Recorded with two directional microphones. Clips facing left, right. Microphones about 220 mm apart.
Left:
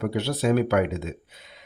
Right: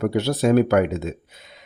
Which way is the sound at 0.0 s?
45° right (ahead or behind).